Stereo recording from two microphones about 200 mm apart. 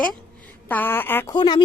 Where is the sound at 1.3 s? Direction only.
20° left (ahead or behind).